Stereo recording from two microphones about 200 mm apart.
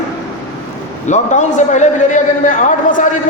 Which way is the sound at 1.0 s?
35° left (ahead or behind).